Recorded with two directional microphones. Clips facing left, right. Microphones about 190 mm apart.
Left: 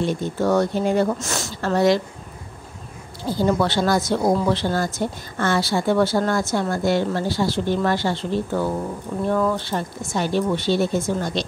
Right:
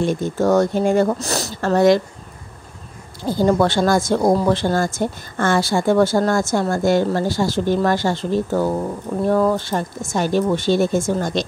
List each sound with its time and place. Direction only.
0.0 s a woman's voice: 45° right (ahead or behind)
3.3 s a woman's voice: 50° right (ahead or behind)